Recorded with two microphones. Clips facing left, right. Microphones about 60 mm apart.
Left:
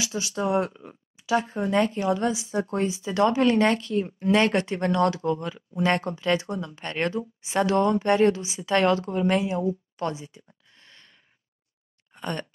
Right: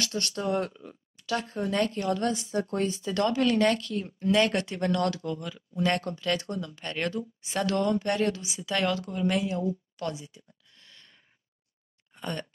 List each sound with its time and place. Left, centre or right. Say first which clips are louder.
0.0 s speech: left 1 dB; centre
0.4 s speech: left 5 dB; centre
12.1 s a sound: left 3 dB; left